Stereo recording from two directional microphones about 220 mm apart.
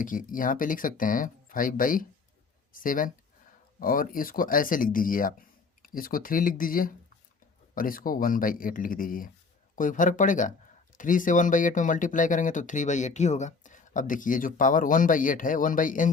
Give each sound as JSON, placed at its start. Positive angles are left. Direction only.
{"t": 0.0, "sound": "speech", "side_deg": 40}